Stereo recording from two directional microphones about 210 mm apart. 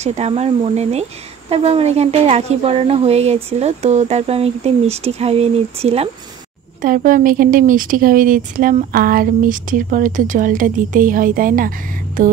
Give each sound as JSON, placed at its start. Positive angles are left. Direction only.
{"t": 0.0, "sound": "speech", "side_deg": -30}
{"t": 6.8, "sound": "speech", "side_deg": -40}